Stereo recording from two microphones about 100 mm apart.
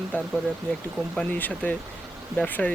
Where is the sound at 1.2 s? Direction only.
15° left (ahead or behind).